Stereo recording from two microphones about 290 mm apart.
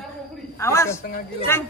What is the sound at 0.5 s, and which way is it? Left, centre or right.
Speech, centre.